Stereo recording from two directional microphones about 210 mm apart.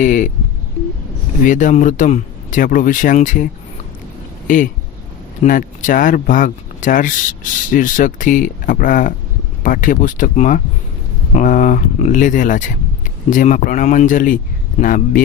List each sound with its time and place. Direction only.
0.0 s speech: 35° left (ahead or behind)
1.5 s speech: 35° left (ahead or behind)